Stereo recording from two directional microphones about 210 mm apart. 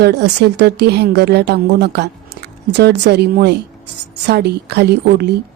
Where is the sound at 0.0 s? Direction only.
55° right (ahead or behind).